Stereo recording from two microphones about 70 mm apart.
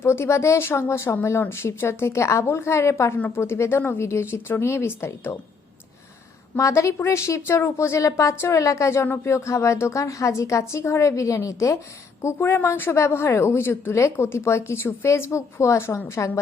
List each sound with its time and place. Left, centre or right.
0.0 s speech: left
3.2 s speech: left
6.6 s a woman's voice: left